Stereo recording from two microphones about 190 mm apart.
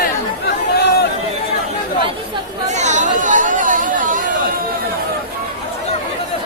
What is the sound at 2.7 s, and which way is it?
Chatter, 40° right (ahead or behind).